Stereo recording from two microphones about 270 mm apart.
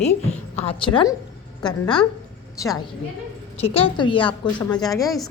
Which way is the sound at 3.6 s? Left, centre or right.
Left.